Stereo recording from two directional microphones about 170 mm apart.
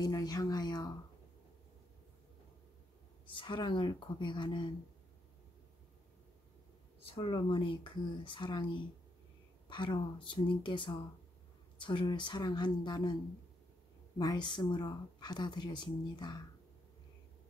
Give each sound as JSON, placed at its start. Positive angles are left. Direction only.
{"t": 0.0, "sound": "a sound", "side_deg": 20}
{"t": 3.3, "sound": "speech", "side_deg": 30}
{"t": 7.1, "sound": "speech", "side_deg": 30}